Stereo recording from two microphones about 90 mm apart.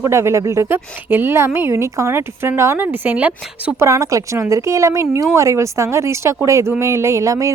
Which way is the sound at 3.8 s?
35° right (ahead or behind).